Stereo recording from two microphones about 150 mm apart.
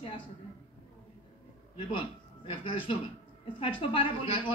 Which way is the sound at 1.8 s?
35° left (ahead or behind).